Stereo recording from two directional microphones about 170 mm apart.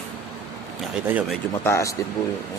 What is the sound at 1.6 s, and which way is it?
Speech, 15° left (ahead or behind).